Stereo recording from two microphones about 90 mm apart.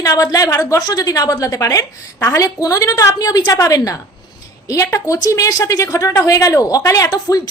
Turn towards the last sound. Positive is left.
turn(degrees=40)  # may be behind; listen again after turning